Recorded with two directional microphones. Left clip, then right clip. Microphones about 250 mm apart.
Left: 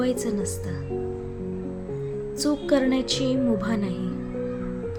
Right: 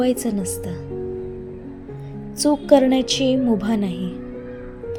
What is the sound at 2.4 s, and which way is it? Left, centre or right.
Speech, centre.